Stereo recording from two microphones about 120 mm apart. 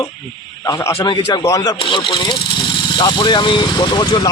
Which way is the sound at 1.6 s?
40° left (ahead or behind).